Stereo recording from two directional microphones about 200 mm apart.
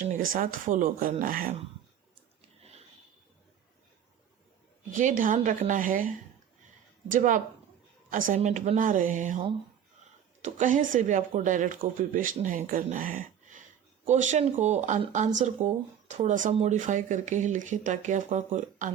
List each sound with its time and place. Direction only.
0.0 s speech: 40° right (ahead or behind)
4.9 s speech: 40° right (ahead or behind)
10.4 s speech: 40° right (ahead or behind)